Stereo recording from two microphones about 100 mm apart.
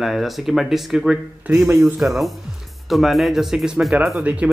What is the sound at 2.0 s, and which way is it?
Speech, centre (ahead or behind).